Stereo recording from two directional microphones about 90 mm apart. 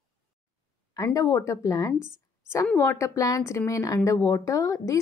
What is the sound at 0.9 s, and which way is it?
A woman's voice, 40° left (ahead or behind).